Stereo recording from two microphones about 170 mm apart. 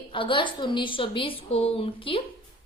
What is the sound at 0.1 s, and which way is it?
A woman's voice, 30° left (ahead or behind).